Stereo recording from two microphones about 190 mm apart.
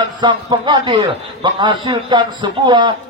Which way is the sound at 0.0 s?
25° right (ahead or behind).